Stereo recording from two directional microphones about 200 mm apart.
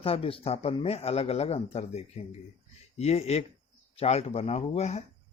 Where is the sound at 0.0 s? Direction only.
30° left (ahead or behind).